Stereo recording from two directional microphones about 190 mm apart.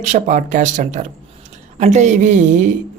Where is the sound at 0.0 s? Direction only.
40° right (ahead or behind).